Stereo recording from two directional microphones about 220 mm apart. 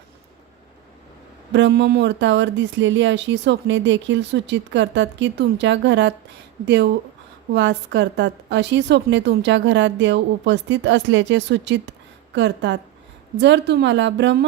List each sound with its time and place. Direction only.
1.5 s a woman's voice: 50° right (ahead or behind)